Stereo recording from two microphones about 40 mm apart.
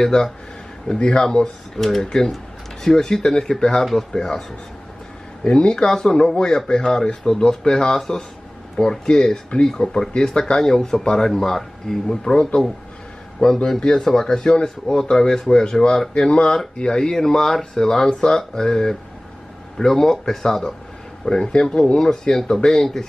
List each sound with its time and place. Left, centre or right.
0.1 s speech: left
13.7 s speech: centre